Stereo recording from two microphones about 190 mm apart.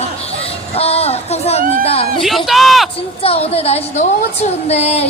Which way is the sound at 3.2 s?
30° left (ahead or behind).